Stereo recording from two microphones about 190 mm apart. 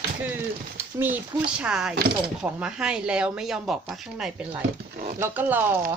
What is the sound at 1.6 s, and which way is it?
Speech, 5° right (ahead or behind).